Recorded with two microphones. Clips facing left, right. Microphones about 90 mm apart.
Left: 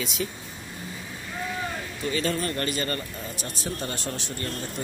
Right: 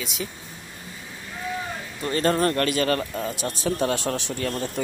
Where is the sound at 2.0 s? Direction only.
50° right (ahead or behind).